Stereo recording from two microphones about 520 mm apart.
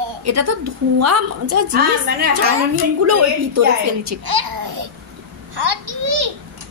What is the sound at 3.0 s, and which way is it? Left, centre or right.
A child's voice, right.